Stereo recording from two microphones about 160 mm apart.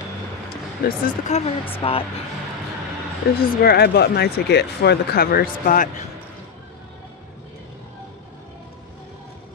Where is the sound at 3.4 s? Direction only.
80° left; by 6.1 s 55° left (ahead or behind).